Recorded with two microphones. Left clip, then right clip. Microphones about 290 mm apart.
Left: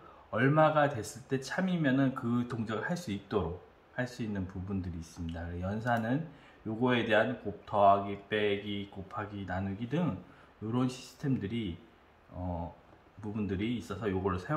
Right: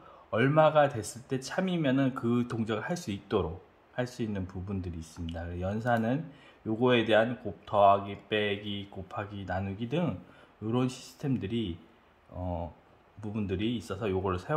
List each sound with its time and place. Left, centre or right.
0.3 s speech: right
13.2 s speech: right